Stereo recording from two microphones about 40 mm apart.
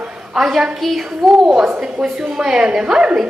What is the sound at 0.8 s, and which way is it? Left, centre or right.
Child singing, centre.